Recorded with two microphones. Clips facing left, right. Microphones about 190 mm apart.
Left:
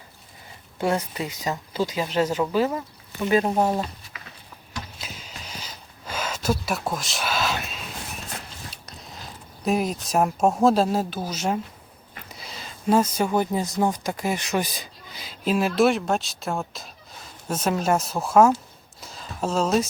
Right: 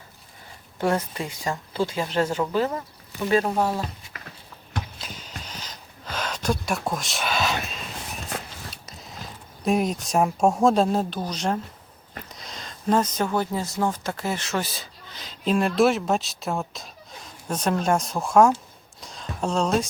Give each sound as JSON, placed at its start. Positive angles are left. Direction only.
{"t": 0.8, "sound": "speech", "side_deg": 10}
{"t": 4.9, "sound": "a sound", "side_deg": 10}
{"t": 9.6, "sound": "speech", "side_deg": 0}